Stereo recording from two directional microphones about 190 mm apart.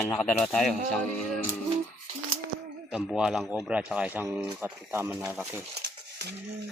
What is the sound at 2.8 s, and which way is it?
Speech, 5° right (ahead or behind).